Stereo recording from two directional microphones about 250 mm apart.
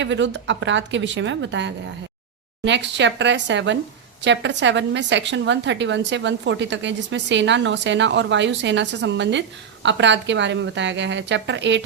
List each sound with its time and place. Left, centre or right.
0.0 s a woman's voice: right